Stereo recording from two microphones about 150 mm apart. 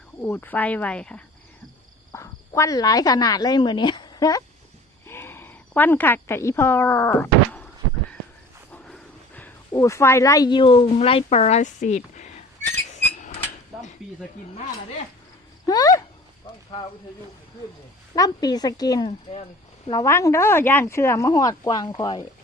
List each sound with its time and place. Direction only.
0.2 s speech: 15° left (ahead or behind)
2.1 s speech: 20° left (ahead or behind)
5.0 s a sound: 15° left (ahead or behind)
8.7 s a sound: 10° left (ahead or behind)
9.7 s speech: 20° left (ahead or behind); by 12.3 s 50° left (ahead or behind)
15.6 s a sound: 25° left (ahead or behind)
18.1 s speech: 25° left (ahead or behind)
19.0 s speech: 40° left (ahead or behind)
19.9 s speech: 20° left (ahead or behind)